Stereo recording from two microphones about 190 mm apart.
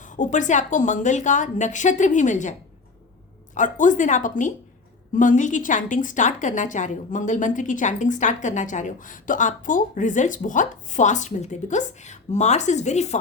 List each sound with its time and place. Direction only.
0.0 s a woman's voice: 40° left (ahead or behind)